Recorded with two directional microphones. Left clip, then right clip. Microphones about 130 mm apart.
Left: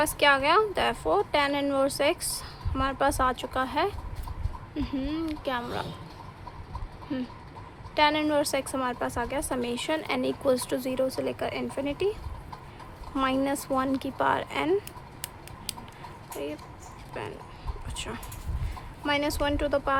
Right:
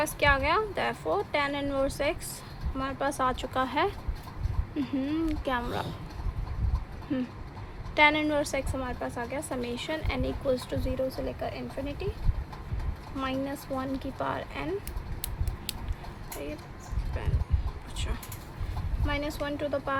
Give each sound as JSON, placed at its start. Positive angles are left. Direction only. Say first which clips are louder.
{"t": 0.0, "sound": "a woman's voice", "louder": "left 3 dB", "side_deg": 35}
{"t": 3.1, "sound": "speech", "louder": "left 2 dB", "side_deg": 25}
{"t": 7.1, "sound": "speech", "louder": "right 1 dB", "side_deg": 5}
{"t": 8.2, "sound": "a woman's voice", "louder": "left 2 dB", "side_deg": 30}
{"t": 13.1, "sound": "speech", "louder": "left 6 dB", "side_deg": 60}
{"t": 17.9, "sound": "a woman's voice", "louder": "left 3 dB", "side_deg": 40}